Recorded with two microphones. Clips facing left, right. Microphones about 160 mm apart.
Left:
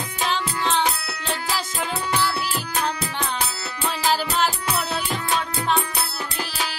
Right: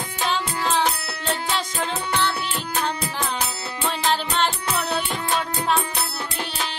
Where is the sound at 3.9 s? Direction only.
5° left (ahead or behind).